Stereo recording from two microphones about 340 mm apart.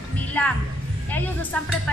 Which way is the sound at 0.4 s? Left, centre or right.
Centre.